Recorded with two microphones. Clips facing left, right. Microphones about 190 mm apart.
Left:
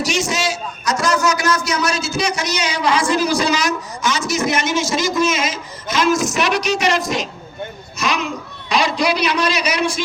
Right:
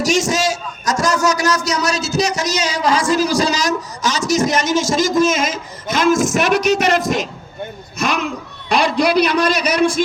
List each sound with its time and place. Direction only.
0.0 s a man's voice: 45° right (ahead or behind)